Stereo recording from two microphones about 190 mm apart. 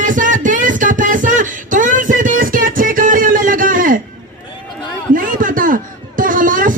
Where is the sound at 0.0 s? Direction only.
45° right (ahead or behind).